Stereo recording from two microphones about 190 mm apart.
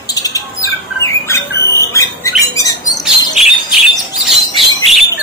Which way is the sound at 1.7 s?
15° left (ahead or behind).